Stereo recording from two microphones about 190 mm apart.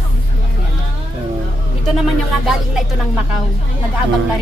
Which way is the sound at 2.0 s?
Centre (ahead or behind).